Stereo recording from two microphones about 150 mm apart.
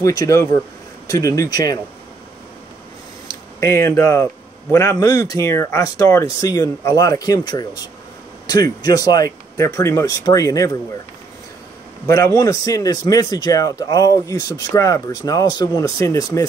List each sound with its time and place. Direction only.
0.0 s speech: 25° left (ahead or behind)
3.3 s speech: 20° left (ahead or behind)
12.1 s speech: 20° left (ahead or behind)